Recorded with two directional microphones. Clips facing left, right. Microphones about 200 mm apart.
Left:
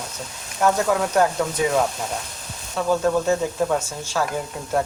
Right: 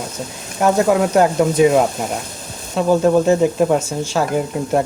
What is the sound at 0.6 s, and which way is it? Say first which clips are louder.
Frying: right 5 dB; 20° right (ahead or behind).